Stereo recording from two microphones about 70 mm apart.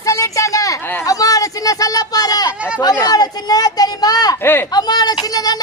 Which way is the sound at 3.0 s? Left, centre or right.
Left.